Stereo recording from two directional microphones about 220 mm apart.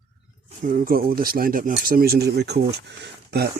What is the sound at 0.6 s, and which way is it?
Speech, 40° right (ahead or behind).